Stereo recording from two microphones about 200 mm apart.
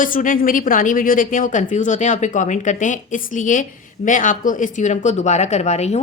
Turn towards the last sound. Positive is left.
turn(degrees=35)  # may be behind; listen again after turning